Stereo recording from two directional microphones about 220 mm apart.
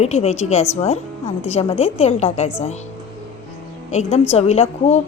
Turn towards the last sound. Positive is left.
turn(degrees=30)  # may be behind; listen again after turning